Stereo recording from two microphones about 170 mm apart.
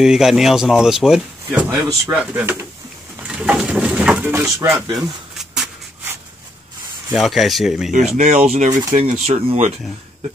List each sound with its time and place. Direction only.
0.0 s speech: centre (ahead or behind)
5.0 s a sound: centre (ahead or behind)
7.1 s speech: centre (ahead or behind)
8.2 s speech: 45° right (ahead or behind)